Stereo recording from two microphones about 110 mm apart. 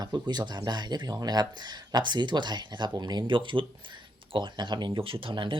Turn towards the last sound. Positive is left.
turn(degrees=-50)  # may be behind; listen again after turning